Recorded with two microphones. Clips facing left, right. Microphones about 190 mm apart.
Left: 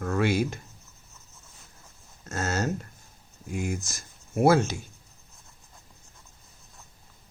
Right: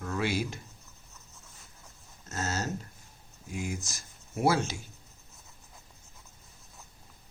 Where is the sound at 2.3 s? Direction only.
55° left (ahead or behind).